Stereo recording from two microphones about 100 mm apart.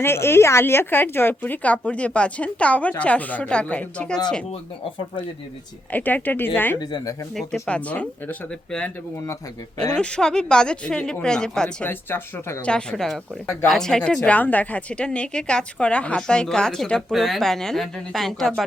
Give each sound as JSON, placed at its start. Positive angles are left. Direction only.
{"t": 0.0, "sound": "a woman's voice", "side_deg": 25}
{"t": 5.9, "sound": "a woman's voice", "side_deg": 15}
{"t": 6.7, "sound": "speech", "side_deg": 40}
{"t": 7.3, "sound": "speech", "side_deg": 0}
{"t": 7.7, "sound": "a woman's voice", "side_deg": 15}
{"t": 10.0, "sound": "a woman's voice", "side_deg": 10}
{"t": 11.9, "sound": "a woman's voice", "side_deg": 20}
{"t": 12.6, "sound": "a woman's voice", "side_deg": 10}